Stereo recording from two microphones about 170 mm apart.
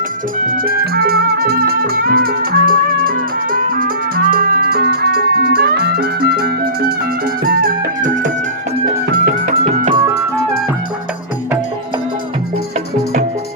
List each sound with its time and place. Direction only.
0.4 s music: 55° right (ahead or behind)